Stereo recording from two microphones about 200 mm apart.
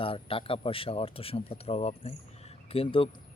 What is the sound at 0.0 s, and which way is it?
Speech, 25° left (ahead or behind).